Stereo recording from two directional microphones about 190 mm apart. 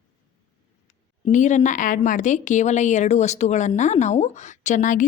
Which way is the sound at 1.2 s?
40° left (ahead or behind).